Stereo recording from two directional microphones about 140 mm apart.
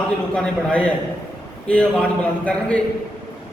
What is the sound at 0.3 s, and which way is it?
A man's voice, 5° left (ahead or behind).